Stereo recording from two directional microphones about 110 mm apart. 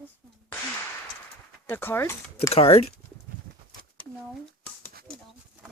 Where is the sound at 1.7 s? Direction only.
20° left (ahead or behind).